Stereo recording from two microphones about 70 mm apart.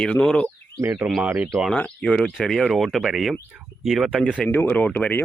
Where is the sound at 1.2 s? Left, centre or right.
Right.